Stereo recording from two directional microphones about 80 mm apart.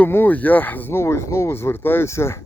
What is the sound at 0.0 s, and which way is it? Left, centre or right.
Speech, left.